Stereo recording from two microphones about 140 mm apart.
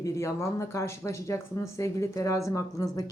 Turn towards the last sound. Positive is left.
turn(degrees=25)  # may be behind; listen again after turning